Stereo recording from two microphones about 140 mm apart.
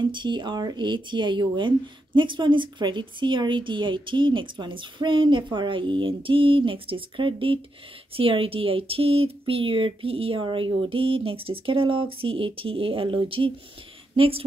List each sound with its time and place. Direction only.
0.0 s a woman's voice: 35° right (ahead or behind)